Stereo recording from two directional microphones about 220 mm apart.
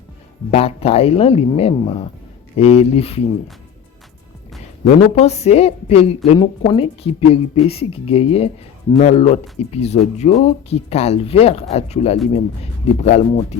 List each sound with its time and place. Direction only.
0.5 s a woman's voice: 25° left (ahead or behind)
4.9 s a woman's voice: 30° left (ahead or behind)